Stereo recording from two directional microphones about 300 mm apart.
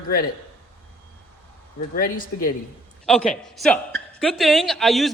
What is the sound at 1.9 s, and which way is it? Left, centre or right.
Speech, left.